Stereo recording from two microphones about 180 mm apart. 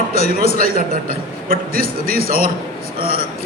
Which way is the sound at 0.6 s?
55° right (ahead or behind).